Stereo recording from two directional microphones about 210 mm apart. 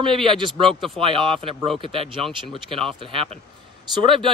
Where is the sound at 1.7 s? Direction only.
25° right (ahead or behind).